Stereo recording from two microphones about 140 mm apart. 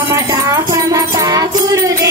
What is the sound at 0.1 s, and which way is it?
Music, 25° right (ahead or behind).